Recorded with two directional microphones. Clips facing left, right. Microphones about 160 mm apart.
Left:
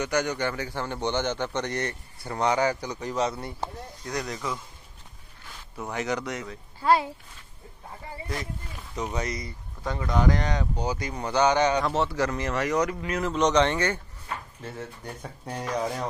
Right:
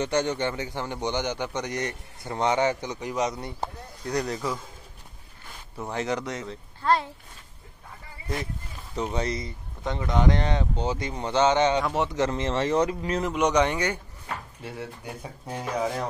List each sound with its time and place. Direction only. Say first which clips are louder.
0.0 s a man's voice: right 1 dB; 25° right (ahead or behind)
4.0 s speech: right 4 dB; 35° right (ahead or behind)
5.9 s a man's voice: right 1 dB; 25° right (ahead or behind)
6.8 s speech: left 2 dB; 5° left (ahead or behind)
9.1 s a man's voice: right 3 dB; 30° right (ahead or behind)
13.3 s speech: left 1 dB; 10° right (ahead or behind)